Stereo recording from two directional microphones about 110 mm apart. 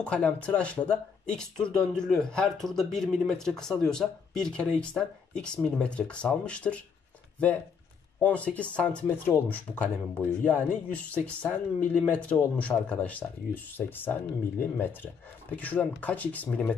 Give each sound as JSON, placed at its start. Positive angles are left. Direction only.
{"t": 0.0, "sound": "speech", "side_deg": 10}
{"t": 8.2, "sound": "speech", "side_deg": 15}